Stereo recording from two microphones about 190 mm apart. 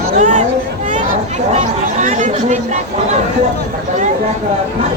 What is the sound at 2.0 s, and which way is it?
Speech, 40° right (ahead or behind).